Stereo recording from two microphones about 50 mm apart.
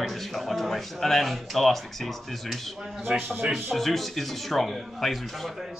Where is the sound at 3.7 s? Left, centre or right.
Centre.